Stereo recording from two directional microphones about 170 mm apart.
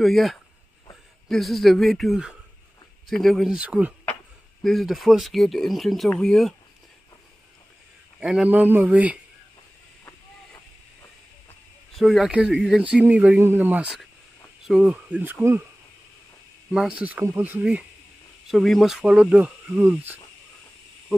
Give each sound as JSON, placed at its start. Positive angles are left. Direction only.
{"t": 0.0, "sound": "speech", "side_deg": 0}
{"t": 8.2, "sound": "speech", "side_deg": -5}
{"t": 11.9, "sound": "speech", "side_deg": 0}
{"t": 16.7, "sound": "speech", "side_deg": -5}